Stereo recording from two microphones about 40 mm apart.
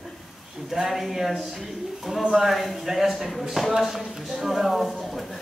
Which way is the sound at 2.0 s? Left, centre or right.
Centre.